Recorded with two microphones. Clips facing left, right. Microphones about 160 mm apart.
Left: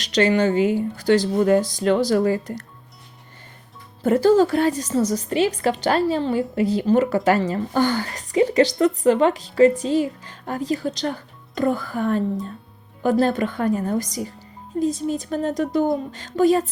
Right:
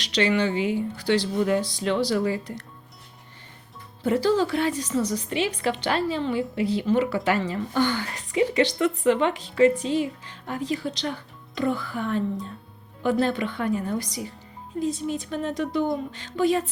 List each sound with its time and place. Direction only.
0.0 s a woman's voice: 45° left (ahead or behind)
4.0 s a woman's voice: 50° left (ahead or behind)